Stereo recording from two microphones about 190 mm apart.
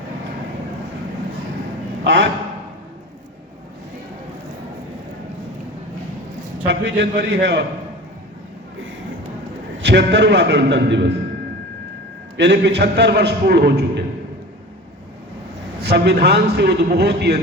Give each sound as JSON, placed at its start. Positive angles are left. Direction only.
{"t": 2.1, "sound": "a man's voice", "side_deg": -70}
{"t": 6.7, "sound": "a man's voice", "side_deg": -65}
{"t": 9.8, "sound": "a man's voice", "side_deg": -65}
{"t": 12.4, "sound": "a man's voice", "side_deg": -65}
{"t": 15.8, "sound": "a man's voice", "side_deg": -60}